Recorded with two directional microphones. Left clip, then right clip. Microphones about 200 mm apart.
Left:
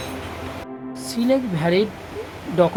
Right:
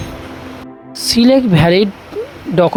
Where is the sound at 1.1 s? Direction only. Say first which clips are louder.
Right 10 dB; 40° right (ahead or behind).